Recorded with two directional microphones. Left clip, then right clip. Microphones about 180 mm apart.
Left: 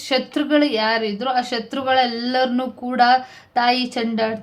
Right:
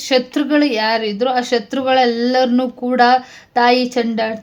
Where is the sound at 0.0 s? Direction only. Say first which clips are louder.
Right 5 dB; 30° right (ahead or behind).